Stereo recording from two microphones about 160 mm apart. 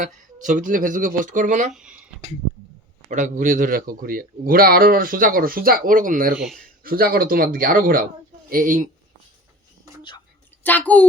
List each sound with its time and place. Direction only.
0.0 s speech: 55° right (ahead or behind)
1.7 s speech: 5° right (ahead or behind)
3.1 s speech: 50° right (ahead or behind)
6.3 s a man's voice: centre (ahead or behind)
6.8 s speech: 70° right (ahead or behind)
10.6 s a child's voice: 10° left (ahead or behind)